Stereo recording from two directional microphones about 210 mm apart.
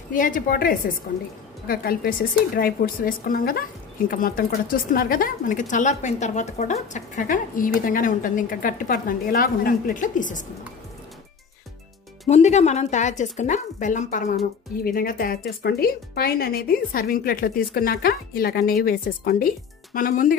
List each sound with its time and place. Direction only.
0.1 s a woman's voice: 40° left (ahead or behind)
12.3 s a woman's voice: 35° left (ahead or behind)